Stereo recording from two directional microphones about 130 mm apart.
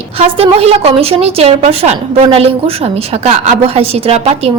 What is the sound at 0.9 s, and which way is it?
A woman's voice, 50° right (ahead or behind).